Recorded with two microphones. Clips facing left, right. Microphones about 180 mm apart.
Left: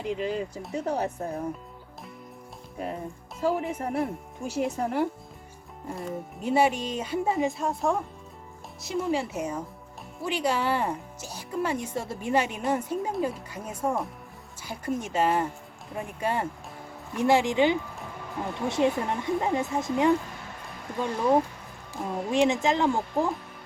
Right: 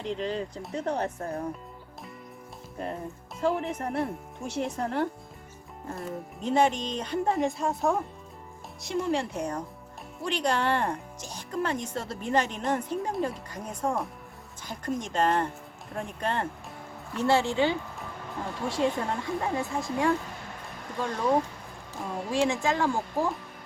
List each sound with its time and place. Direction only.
0.0 s speech: 5° left (ahead or behind)
2.7 s speech: 5° left (ahead or behind)
22.3 s speech: 20° left (ahead or behind)